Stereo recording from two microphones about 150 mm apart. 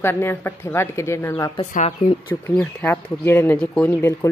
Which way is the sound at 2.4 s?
10° left (ahead or behind).